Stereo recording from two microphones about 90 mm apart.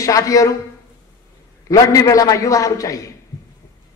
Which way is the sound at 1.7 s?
40° left (ahead or behind).